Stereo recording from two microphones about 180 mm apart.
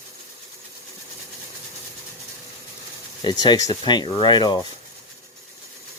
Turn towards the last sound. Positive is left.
turn(degrees=25)  # may be behind; listen again after turning